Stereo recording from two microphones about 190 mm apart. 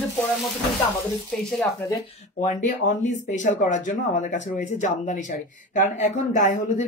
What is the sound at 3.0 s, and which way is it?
Speech, 40° left (ahead or behind).